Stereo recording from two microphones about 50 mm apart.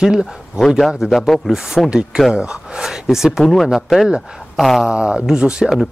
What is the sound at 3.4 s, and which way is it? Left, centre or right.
Speech, centre.